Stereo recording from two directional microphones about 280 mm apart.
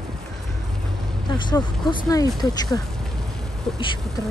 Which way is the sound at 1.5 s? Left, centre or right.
Centre.